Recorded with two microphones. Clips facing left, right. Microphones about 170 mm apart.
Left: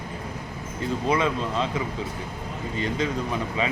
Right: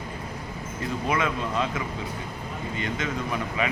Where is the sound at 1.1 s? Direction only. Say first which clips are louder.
Left 2 dB; 30° left (ahead or behind).